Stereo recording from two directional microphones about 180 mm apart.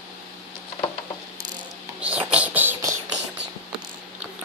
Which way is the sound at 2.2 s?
5° right (ahead or behind).